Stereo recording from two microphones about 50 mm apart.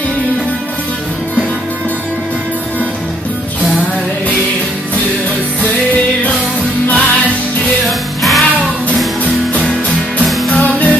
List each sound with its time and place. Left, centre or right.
6.9 s music: left
8.2 s music: centre
10.5 s music: left